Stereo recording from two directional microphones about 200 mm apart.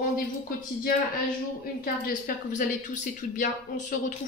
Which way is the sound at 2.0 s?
40° left (ahead or behind).